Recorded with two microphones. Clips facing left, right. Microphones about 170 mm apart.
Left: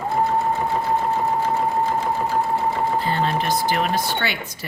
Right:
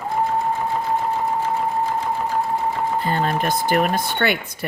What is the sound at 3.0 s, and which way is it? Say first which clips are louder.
Speech: right 1 dB; 50° right (ahead or behind).